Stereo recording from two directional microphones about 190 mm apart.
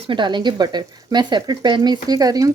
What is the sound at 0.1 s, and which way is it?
Speech, 25° right (ahead or behind).